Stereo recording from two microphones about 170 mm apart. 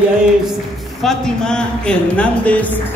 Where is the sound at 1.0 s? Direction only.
5° left (ahead or behind).